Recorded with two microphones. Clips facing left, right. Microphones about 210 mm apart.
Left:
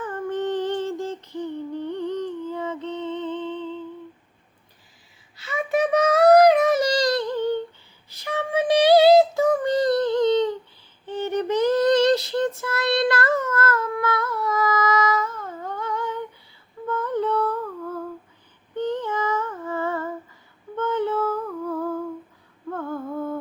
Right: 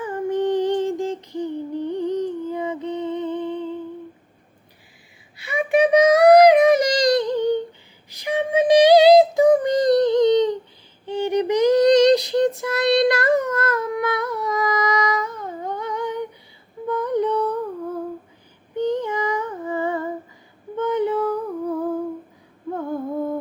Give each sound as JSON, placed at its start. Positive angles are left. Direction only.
{"t": 0.0, "sound": "a sound", "side_deg": -10}
{"t": 5.4, "sound": "child singing", "side_deg": -15}
{"t": 8.1, "sound": "female singing", "side_deg": -15}
{"t": 16.8, "sound": "music", "side_deg": -15}
{"t": 18.8, "sound": "female singing", "side_deg": -15}
{"t": 20.7, "sound": "humming", "side_deg": -15}
{"t": 22.7, "sound": "a sound", "side_deg": -15}
{"t": 23.1, "sound": "humming", "side_deg": -15}